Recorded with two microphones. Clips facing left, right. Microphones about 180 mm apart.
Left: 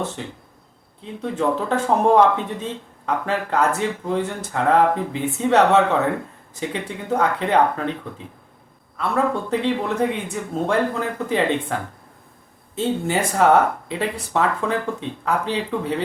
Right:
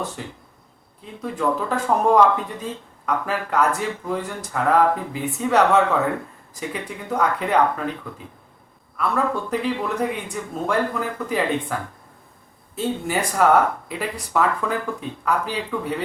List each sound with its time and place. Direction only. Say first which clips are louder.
1.2 s speech: left 1 dB; 25° left (ahead or behind)
9.0 s speech: left 1 dB; 25° left (ahead or behind)